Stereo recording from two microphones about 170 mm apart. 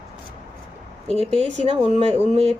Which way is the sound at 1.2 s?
40° right (ahead or behind).